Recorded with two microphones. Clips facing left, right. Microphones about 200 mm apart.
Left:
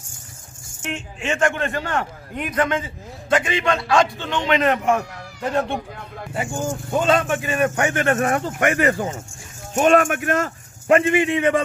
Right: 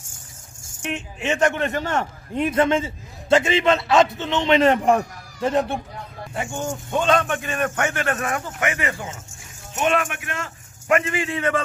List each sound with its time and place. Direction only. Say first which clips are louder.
0.8 s a man's voice: right 1 dB; 20° right (ahead or behind)
5.4 s a man's voice: right 2 dB; 20° right (ahead or behind)
6.9 s a man's voice: left 1 dB; 5° left (ahead or behind)
8.0 s speech: left 5 dB; 50° left (ahead or behind)
10.9 s a man's voice: left 5 dB; 25° left (ahead or behind)